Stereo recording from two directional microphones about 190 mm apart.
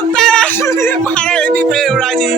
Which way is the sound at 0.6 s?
15° left (ahead or behind).